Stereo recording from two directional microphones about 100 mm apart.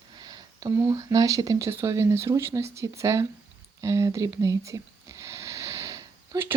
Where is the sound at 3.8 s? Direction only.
30° right (ahead or behind).